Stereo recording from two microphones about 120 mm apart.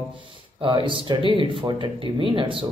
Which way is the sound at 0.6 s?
45° right (ahead or behind).